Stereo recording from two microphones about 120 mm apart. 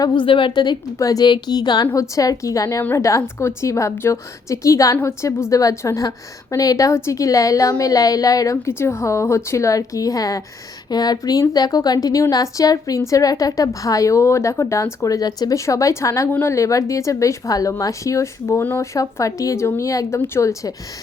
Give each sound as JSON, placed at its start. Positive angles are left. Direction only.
{"t": 0.0, "sound": "a woman's voice", "side_deg": 40}